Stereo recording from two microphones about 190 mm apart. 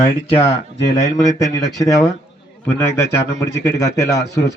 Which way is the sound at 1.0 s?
15° left (ahead or behind).